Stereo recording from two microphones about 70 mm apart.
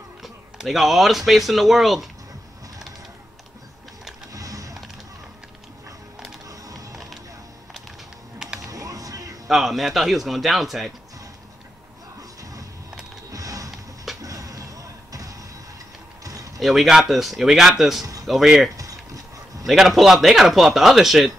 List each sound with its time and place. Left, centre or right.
0.2 s speech: centre
4.3 s music: right
8.6 s a sound: right
9.5 s a man's voice: centre
13.3 s a sound: right
16.5 s a man's voice: centre